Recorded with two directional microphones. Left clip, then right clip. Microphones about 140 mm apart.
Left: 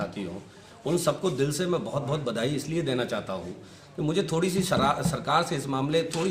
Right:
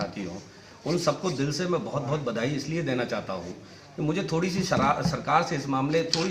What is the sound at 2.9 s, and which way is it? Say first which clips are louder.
Speech: right 1 dB; 20° left (ahead or behind).